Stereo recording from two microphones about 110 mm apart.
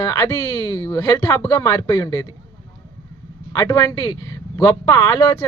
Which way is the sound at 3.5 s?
30° left (ahead or behind).